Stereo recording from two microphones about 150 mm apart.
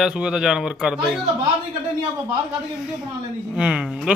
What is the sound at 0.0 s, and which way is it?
Speech, 5° right (ahead or behind).